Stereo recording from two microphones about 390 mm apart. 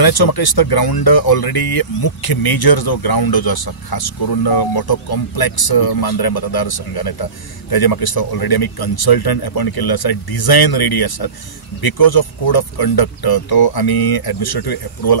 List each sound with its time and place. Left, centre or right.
0.0 s speech: left